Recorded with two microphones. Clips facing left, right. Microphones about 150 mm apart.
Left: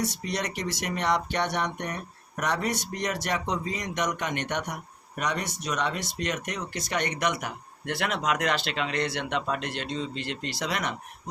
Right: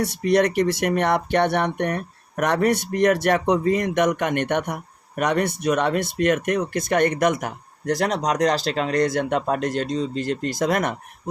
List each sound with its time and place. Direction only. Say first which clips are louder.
0.0 s speech: right 11 dB; 60° right (ahead or behind)